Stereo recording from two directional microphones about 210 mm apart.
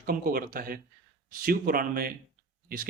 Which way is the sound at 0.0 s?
45° right (ahead or behind).